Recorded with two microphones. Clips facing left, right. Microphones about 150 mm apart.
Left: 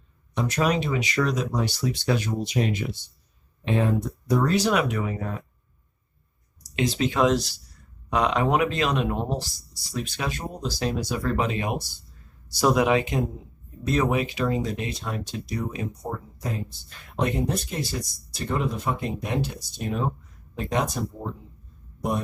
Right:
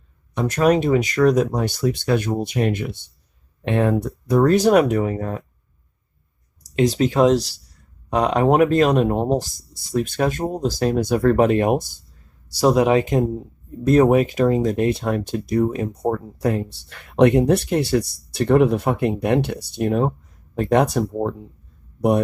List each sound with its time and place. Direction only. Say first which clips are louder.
0.3 s speech: right 7 dB; 50° right (ahead or behind)
6.7 s speech: right 6 dB; 40° right (ahead or behind)
12.5 s speech: right 5 dB; 35° right (ahead or behind); by 21.3 s 65° right (ahead or behind)